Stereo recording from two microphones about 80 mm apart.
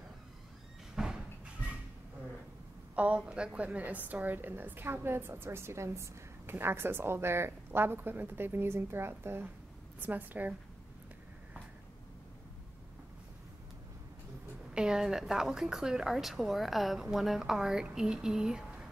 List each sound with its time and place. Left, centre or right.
0.9 s a sound: centre
3.0 s a woman's voice: centre
14.7 s a woman's voice: centre